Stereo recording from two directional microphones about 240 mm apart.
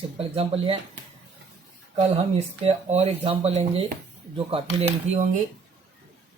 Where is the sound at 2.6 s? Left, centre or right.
Right.